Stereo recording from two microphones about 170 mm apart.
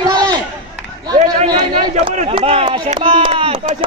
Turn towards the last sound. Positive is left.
turn(degrees=-30)  # may be behind; listen again after turning